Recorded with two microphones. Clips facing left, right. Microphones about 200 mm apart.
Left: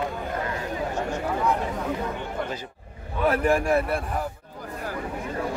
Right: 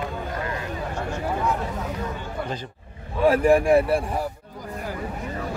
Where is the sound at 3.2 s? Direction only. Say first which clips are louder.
Right 5 dB; 30° right (ahead or behind).